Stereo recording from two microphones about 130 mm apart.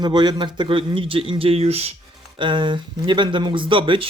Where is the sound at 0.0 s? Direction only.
35° right (ahead or behind); by 1.9 s 50° right (ahead or behind).